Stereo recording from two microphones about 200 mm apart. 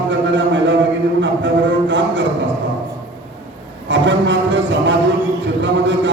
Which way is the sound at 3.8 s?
65° right (ahead or behind).